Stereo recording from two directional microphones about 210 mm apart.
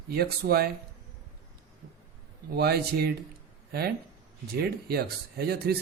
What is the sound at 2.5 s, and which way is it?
Speech, 50° right (ahead or behind).